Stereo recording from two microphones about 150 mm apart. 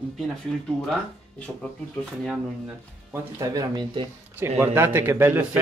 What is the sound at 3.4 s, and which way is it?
Speech, 25° right (ahead or behind).